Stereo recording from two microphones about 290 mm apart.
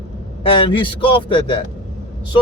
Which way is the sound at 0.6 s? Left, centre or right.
Centre.